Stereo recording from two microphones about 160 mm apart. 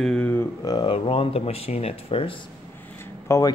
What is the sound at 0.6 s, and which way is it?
Speech, 25° left (ahead or behind).